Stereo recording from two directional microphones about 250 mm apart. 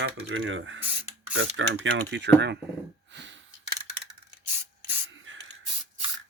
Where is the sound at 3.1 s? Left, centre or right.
Right.